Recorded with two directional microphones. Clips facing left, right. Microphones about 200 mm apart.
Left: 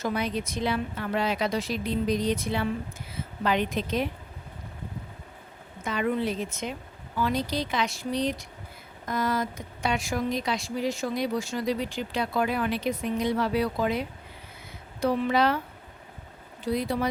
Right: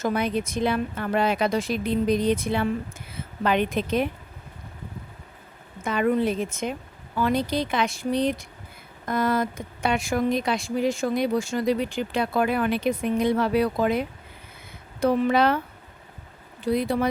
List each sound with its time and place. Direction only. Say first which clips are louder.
0.0 s a woman's voice: right 4 dB; 55° right (ahead or behind)
5.8 s a woman's voice: right 5 dB; 50° right (ahead or behind)
15.0 s a woman's voice: right 3 dB; 55° right (ahead or behind)
16.6 s a woman's voice: right 4 dB; 55° right (ahead or behind)